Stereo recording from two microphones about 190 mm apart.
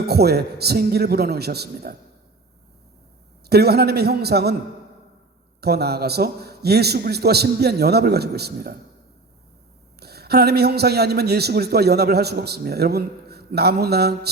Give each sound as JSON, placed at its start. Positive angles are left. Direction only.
{"t": 0.0, "sound": "a man's voice", "side_deg": -55}
{"t": 3.5, "sound": "a man's voice", "side_deg": -55}
{"t": 5.5, "sound": "a man's voice", "side_deg": -55}
{"t": 10.0, "sound": "a man's voice", "side_deg": -55}